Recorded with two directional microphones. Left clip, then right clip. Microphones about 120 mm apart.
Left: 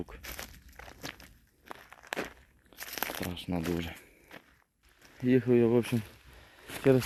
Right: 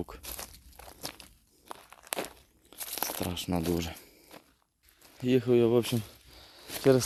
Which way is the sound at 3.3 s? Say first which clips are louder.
Right 4 dB; 90° right.